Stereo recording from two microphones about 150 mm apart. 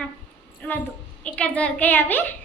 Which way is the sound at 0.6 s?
10° left (ahead or behind).